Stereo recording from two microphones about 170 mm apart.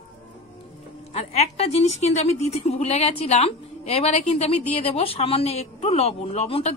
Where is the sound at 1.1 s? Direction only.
40° left (ahead or behind).